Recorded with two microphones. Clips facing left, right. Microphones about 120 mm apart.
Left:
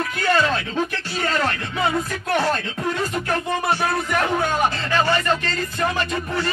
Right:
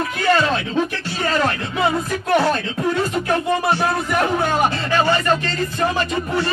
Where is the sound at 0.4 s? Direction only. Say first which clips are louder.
Right 1 dB; 25° right (ahead or behind).